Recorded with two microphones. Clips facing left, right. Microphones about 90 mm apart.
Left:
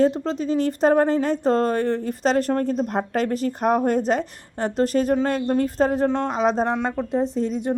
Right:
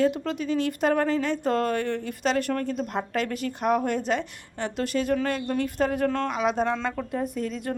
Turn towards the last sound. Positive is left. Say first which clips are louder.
# left 6 dB
turn(degrees=20)  # may be behind; listen again after turning